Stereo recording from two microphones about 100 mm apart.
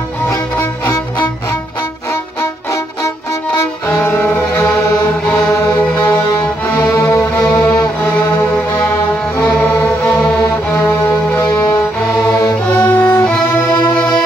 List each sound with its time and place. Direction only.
0.6 s music: 30° left (ahead or behind)
3.9 s music: 25° left (ahead or behind)
4.8 s music: 30° left (ahead or behind)
7.1 s music: 40° left (ahead or behind)
9.4 s music: 15° left (ahead or behind)
12.7 s music: 20° left (ahead or behind)